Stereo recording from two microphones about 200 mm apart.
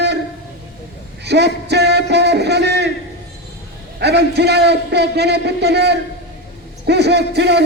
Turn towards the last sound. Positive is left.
turn(degrees=-55)  # may be behind; listen again after turning